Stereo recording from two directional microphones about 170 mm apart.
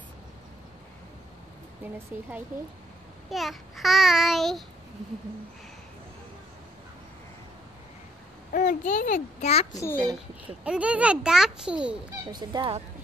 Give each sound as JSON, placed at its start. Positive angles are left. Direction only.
{"t": 2.1, "sound": "a child's voice", "side_deg": -10}
{"t": 3.3, "sound": "babbling", "side_deg": 0}
{"t": 8.5, "sound": "a child's voice", "side_deg": 50}
{"t": 9.7, "sound": "a child's voice", "side_deg": 20}
{"t": 10.1, "sound": "a child's voice", "side_deg": -5}
{"t": 12.3, "sound": "speech", "side_deg": -25}